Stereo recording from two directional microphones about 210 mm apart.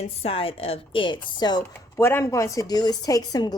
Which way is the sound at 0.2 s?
25° left (ahead or behind).